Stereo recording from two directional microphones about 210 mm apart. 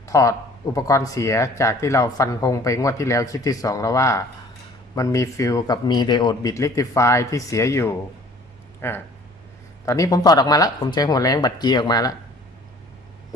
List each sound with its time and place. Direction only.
0.0 s speech: 15° left (ahead or behind)